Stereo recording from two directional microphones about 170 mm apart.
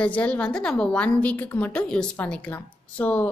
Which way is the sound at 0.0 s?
10° left (ahead or behind).